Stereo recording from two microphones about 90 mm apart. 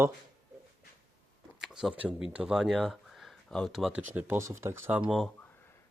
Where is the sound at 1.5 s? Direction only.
5° right (ahead or behind).